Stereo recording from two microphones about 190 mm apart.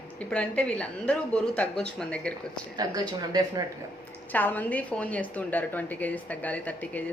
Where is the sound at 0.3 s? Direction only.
5° left (ahead or behind).